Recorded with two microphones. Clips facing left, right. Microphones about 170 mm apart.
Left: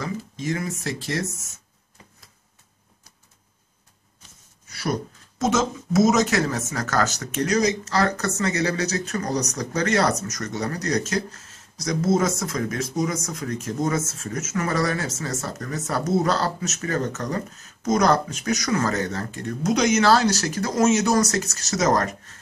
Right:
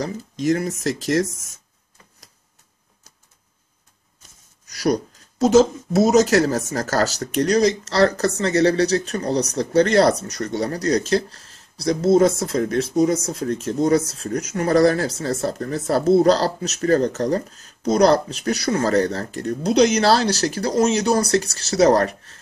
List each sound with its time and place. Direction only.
0.0 s speech: 40° right (ahead or behind)
4.6 s a sound: 40° right (ahead or behind)
5.4 s speech: 35° right (ahead or behind)